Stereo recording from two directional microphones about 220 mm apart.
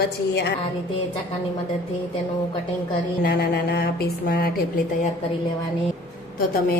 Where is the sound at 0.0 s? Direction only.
50° left (ahead or behind).